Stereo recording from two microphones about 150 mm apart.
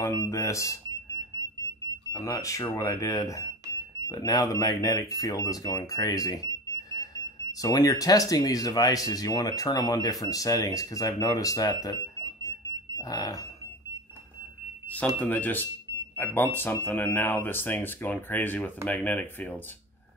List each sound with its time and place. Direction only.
0.0 s speech: 20° left (ahead or behind)
15.1 s speech: 10° left (ahead or behind)